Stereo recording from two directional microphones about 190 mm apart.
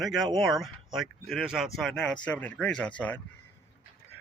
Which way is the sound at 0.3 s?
Centre (ahead or behind).